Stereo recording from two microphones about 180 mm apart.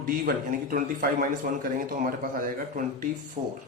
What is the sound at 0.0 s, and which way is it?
A man's voice, 50° right (ahead or behind).